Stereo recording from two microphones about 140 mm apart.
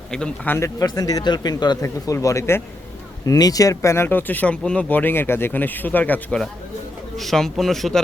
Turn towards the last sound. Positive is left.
turn(degrees=0)  # may be behind; listen again after turning